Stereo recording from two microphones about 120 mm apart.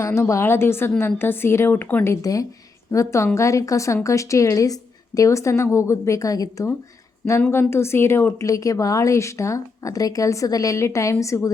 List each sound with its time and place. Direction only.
0.0 s a woman's voice: 25° left (ahead or behind)
2.2 s a woman's voice: 30° left (ahead or behind)